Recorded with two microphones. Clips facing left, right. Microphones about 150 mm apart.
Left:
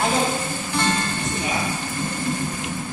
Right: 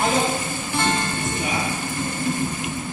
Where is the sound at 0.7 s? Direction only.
15° right (ahead or behind).